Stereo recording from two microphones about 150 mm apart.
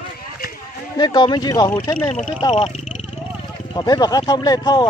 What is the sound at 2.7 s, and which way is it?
Wild animals, 50° left (ahead or behind).